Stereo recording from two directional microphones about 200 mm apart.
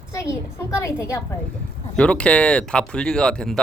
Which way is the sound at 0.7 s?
15° left (ahead or behind).